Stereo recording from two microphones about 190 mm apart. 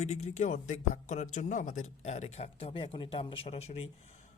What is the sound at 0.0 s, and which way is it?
Speech, 35° left (ahead or behind).